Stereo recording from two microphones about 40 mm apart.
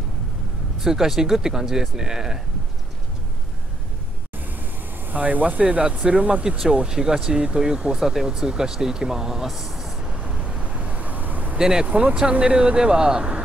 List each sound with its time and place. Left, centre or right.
0.7 s speech: centre
5.0 s speech: right; by 10.1 s centre
10.2 s vehicle: centre; by 11.5 s right
11.5 s speech: centre
11.9 s speech: right